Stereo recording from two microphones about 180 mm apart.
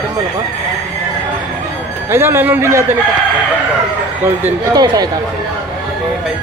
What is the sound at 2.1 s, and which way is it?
Speech, 15° right (ahead or behind).